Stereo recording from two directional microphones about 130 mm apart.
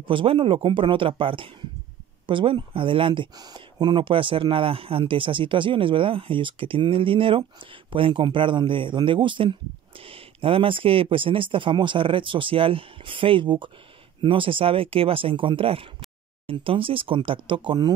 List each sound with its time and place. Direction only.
0.0 s speech: 40° right (ahead or behind)